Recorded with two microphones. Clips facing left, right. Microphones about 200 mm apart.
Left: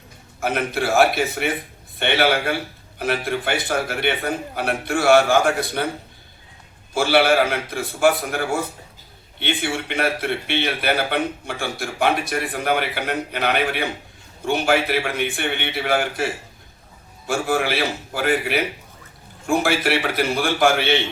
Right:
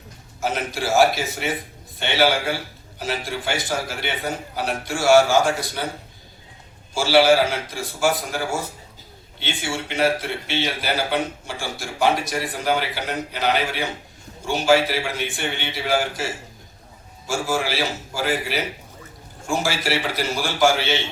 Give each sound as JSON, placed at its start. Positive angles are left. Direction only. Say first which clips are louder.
{"t": 0.3, "sound": "a man's voice", "louder": "left 3 dB", "side_deg": 60}
{"t": 6.9, "sound": "a man's voice", "louder": "right 1 dB", "side_deg": 60}